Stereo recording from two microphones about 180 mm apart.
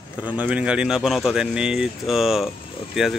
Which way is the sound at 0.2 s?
5° right (ahead or behind).